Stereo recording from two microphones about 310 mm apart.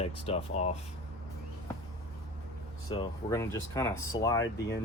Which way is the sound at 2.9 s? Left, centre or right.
Centre.